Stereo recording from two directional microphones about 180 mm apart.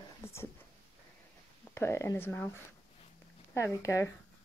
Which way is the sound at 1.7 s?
15° left (ahead or behind).